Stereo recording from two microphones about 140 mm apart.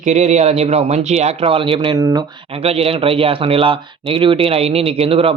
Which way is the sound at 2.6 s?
45° right (ahead or behind).